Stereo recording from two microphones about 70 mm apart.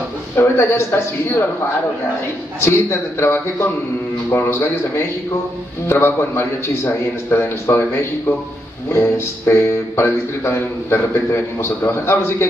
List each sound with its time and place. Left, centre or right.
0.4 s a man's voice: left
2.6 s a man's voice: left
9.5 s a man's voice: left